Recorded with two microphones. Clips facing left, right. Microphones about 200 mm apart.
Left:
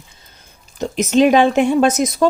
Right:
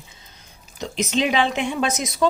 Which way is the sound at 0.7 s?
50° left (ahead or behind).